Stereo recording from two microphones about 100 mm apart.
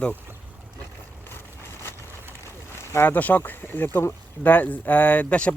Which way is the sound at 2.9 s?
20° left (ahead or behind).